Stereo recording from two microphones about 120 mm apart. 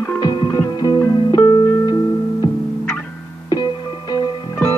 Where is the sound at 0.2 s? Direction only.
35° left (ahead or behind).